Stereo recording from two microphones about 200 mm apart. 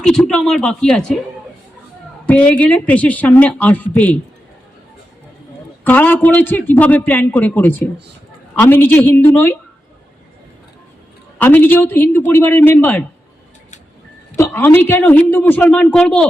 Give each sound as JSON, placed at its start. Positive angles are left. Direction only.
{"t": 0.0, "sound": "speech", "side_deg": 5}
{"t": 2.2, "sound": "a man's voice", "side_deg": 5}
{"t": 5.8, "sound": "a man's voice", "side_deg": 10}
{"t": 11.3, "sound": "a man's voice", "side_deg": 10}
{"t": 14.3, "sound": "a man's voice", "side_deg": 10}